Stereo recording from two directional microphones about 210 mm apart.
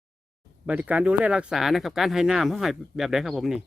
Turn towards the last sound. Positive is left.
turn(degrees=0)  # may be behind; listen again after turning